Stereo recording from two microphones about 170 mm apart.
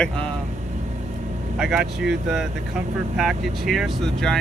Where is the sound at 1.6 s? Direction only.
Centre (ahead or behind).